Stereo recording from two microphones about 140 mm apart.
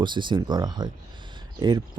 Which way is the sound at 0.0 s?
35° right (ahead or behind).